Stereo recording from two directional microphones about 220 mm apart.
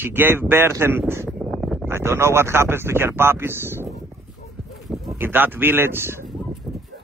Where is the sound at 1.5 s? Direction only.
Centre (ahead or behind).